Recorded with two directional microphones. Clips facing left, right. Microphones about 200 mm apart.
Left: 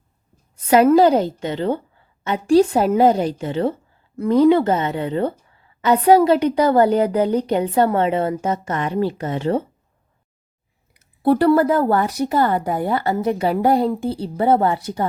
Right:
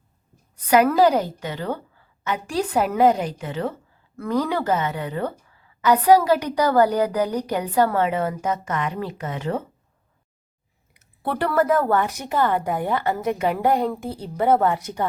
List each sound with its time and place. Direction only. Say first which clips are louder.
0.5 s a woman's voice: left 5 dB; 25° left (ahead or behind)
10.9 s a woman's voice: left 11 dB; 35° left (ahead or behind)